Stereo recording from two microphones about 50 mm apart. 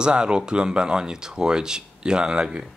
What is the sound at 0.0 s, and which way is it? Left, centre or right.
Speech, centre.